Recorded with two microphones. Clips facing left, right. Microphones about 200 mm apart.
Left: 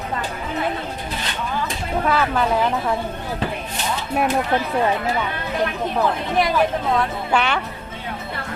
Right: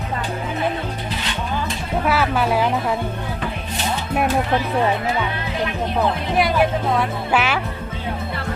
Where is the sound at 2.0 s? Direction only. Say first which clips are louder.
Right 1 dB; 5° right (ahead or behind).